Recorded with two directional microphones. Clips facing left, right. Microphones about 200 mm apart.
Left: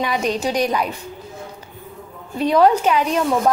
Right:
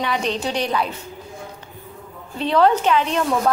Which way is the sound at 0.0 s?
10° left (ahead or behind).